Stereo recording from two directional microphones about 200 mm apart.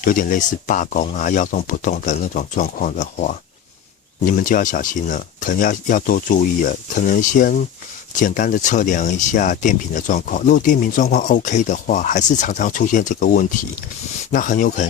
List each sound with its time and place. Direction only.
0.0 s speech: 40° left (ahead or behind)